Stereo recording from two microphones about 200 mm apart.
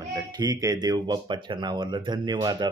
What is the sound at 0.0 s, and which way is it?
Speech, 15° right (ahead or behind).